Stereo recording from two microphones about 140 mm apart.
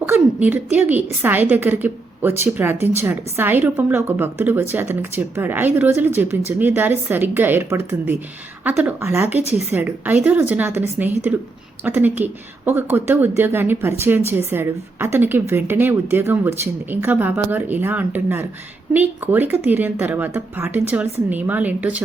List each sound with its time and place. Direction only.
0.0 s a woman's voice: 15° right (ahead or behind)